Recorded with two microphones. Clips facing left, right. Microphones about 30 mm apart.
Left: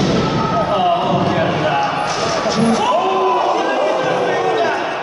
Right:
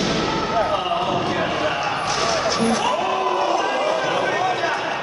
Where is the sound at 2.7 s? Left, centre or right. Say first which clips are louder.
Left 5 dB; left.